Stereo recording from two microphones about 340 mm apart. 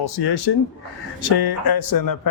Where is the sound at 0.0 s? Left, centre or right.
Left.